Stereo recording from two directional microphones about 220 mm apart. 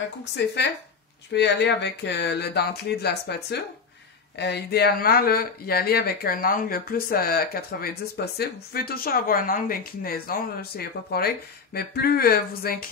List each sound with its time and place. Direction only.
0.2 s speech: 50° left (ahead or behind)